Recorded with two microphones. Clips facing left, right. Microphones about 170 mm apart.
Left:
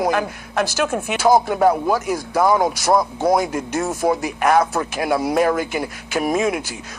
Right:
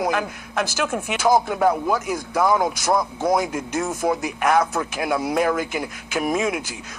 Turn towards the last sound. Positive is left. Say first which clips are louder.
# left 3 dB
turn(degrees=35)  # may be behind; listen again after turning